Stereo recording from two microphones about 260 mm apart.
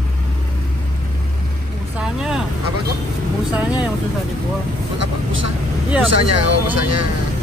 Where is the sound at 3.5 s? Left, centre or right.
Centre.